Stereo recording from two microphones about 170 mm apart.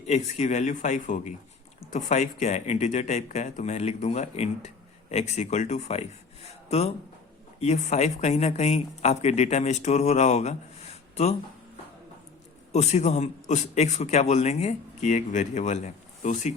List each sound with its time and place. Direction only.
0.1 s speech: 40° left (ahead or behind)
12.7 s speech: 40° left (ahead or behind)